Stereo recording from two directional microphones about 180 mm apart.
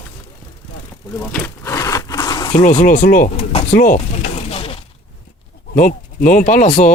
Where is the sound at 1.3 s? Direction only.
10° left (ahead or behind).